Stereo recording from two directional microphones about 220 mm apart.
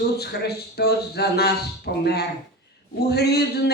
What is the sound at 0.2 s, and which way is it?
Speech, 45° left (ahead or behind).